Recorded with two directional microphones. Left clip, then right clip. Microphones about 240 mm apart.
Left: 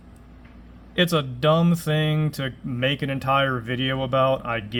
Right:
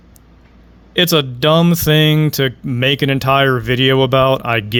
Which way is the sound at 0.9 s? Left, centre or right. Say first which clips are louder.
Right 8 dB; right.